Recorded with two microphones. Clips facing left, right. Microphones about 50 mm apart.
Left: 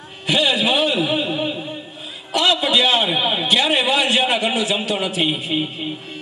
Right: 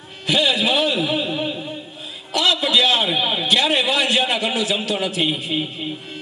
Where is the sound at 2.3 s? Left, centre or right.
Centre.